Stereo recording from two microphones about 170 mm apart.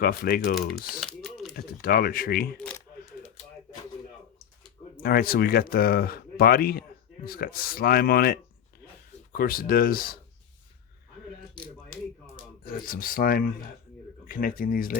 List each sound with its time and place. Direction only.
0.0 s speech: 60° left (ahead or behind)
0.9 s a sound: centre (ahead or behind)
1.5 s speech: 60° left (ahead or behind)
3.1 s a sound: 45° left (ahead or behind)
5.0 s speech: 60° left (ahead or behind)
12.6 s speech: 55° left (ahead or behind)